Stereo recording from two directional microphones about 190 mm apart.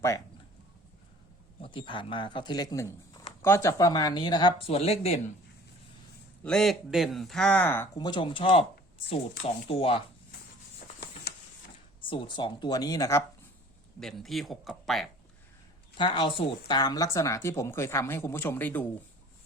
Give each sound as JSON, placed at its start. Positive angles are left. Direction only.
{"t": 1.6, "sound": "speech", "side_deg": 25}
{"t": 6.4, "sound": "speech", "side_deg": 5}
{"t": 7.9, "sound": "speech", "side_deg": 25}
{"t": 9.6, "sound": "speech", "side_deg": 30}
{"t": 12.0, "sound": "speech", "side_deg": 25}
{"t": 14.0, "sound": "speech", "side_deg": 0}
{"t": 16.0, "sound": "speech", "side_deg": 25}